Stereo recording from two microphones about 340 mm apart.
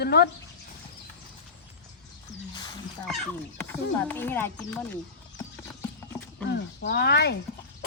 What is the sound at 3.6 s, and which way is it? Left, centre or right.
Speech, centre.